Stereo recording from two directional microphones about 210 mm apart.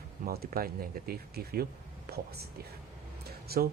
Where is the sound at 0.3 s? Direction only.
45° right (ahead or behind).